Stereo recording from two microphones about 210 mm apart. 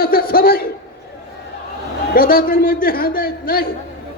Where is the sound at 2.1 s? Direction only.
45° left (ahead or behind).